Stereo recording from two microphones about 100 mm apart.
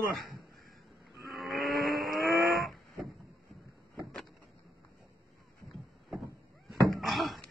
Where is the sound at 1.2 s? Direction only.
Centre (ahead or behind).